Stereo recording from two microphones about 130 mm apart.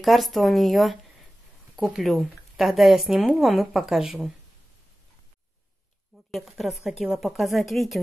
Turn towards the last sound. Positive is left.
turn(degrees=0)  # may be behind; listen again after turning